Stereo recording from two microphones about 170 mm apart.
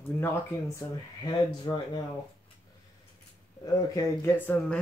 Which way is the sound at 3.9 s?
15° left (ahead or behind).